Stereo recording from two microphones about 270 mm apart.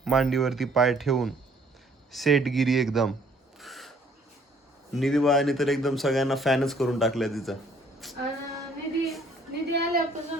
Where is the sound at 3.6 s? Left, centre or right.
Centre.